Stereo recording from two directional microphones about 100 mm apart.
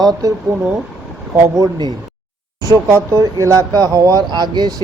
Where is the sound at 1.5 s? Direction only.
35° right (ahead or behind).